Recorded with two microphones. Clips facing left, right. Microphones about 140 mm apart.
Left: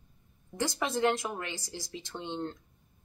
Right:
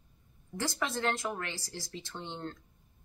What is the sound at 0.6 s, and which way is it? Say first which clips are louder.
Speech: left 4 dB; 20° left (ahead or behind).